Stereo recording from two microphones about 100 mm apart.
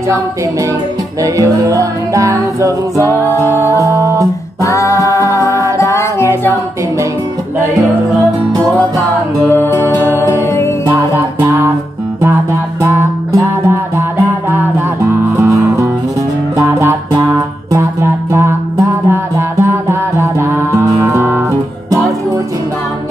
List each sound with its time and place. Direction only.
1.2 s music: 35° right (ahead or behind)
4.6 s singing: 30° left (ahead or behind)
5.3 s music: 30° right (ahead or behind)
5.8 s music: 30° left (ahead or behind)
9.7 s music: 30° right (ahead or behind)
11.0 s music: 25° right (ahead or behind)
12.8 s music: 30° right (ahead or behind)
15.3 s music: 30° right (ahead or behind)
18.3 s music: 30° right (ahead or behind)